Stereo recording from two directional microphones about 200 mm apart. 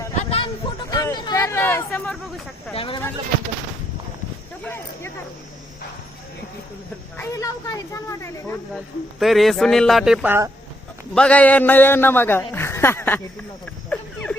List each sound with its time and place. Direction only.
0.3 s music: 30° left (ahead or behind)
0.9 s a sound: 15° left (ahead or behind)
2.7 s speech: 25° left (ahead or behind)
4.6 s a man's voice: 10° left (ahead or behind)
7.2 s a man's voice: 15° left (ahead or behind)
8.7 s speech: centre (ahead or behind)
11.1 s a man's voice: 5° left (ahead or behind)
13.9 s a sound: 5° left (ahead or behind)